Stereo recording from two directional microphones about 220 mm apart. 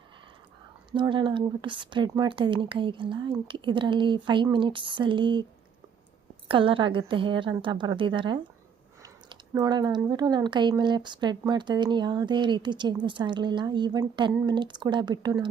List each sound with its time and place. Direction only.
0.9 s speech: 20° right (ahead or behind)
6.5 s speech: 25° right (ahead or behind)